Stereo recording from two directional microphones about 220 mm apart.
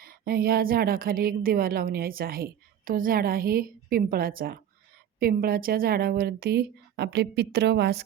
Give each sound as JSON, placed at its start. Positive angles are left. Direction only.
{"t": 0.0, "sound": "a woman's voice", "side_deg": -40}